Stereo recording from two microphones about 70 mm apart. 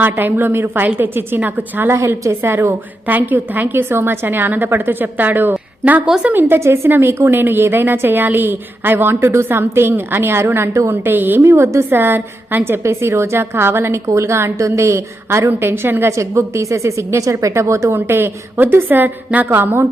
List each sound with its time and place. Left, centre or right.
0.0 s a woman's voice: right
1.9 s a woman's voice: right
6.1 s a woman's voice: centre
6.6 s a woman's voice: right
11.0 s a woman's voice: right
11.4 s a woman's voice: right
11.9 s a woman's voice: right
16.1 s a woman's voice: right